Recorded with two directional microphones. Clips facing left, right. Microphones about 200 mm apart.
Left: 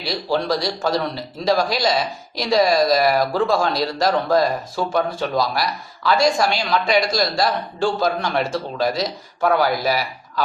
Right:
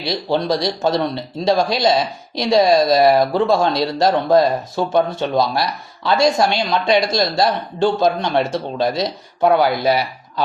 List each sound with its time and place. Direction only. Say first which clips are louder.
0.3 s speech: right 2 dB; 20° right (ahead or behind)